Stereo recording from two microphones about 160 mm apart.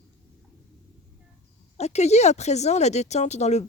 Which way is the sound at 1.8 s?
45° left (ahead or behind).